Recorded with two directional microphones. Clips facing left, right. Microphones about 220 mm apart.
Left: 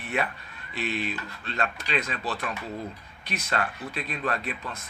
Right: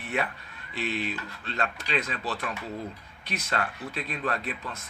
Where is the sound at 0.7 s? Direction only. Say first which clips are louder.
Left 1 dB; 15° left (ahead or behind).